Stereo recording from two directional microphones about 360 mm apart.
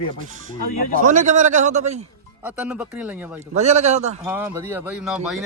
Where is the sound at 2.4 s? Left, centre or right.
Centre.